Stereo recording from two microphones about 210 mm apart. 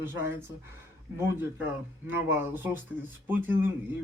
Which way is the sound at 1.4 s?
10° right (ahead or behind).